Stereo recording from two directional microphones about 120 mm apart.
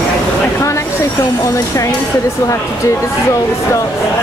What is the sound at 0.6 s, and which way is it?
Speech, 25° left (ahead or behind).